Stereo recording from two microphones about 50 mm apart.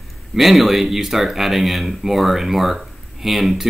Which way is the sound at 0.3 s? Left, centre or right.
Centre.